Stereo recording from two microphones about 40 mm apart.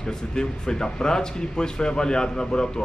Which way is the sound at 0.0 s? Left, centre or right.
Centre.